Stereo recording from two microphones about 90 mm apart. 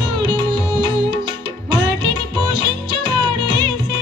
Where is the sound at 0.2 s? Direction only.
55° right (ahead or behind).